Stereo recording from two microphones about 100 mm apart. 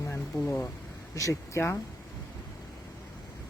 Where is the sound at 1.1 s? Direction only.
30° left (ahead or behind).